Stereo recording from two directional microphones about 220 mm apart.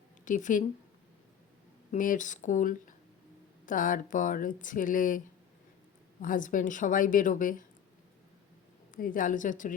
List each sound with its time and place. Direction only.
0.3 s speech: 35° left (ahead or behind)
1.9 s speech: 35° left (ahead or behind)
6.2 s speech: 35° left (ahead or behind)
8.9 s speech: 40° left (ahead or behind)